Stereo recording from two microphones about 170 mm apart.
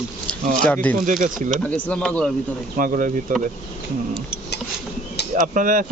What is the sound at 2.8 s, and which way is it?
Speech, 50° right (ahead or behind).